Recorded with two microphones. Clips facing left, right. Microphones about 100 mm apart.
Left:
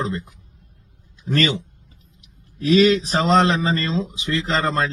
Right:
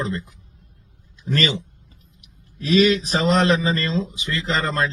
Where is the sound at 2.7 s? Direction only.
30° left (ahead or behind).